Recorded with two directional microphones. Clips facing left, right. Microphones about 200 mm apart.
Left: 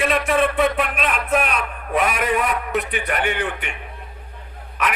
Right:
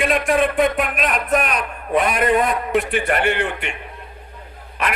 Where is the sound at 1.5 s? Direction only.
35° right (ahead or behind).